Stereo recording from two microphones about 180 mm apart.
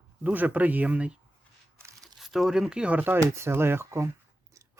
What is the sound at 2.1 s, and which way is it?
Speech, centre (ahead or behind).